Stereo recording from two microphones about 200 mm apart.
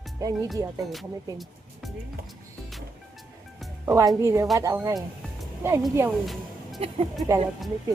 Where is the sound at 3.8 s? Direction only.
15° right (ahead or behind).